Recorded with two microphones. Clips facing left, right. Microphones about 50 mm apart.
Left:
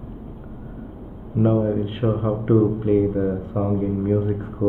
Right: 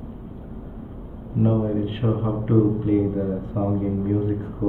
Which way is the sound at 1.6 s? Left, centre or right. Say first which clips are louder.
Left 2 dB; centre.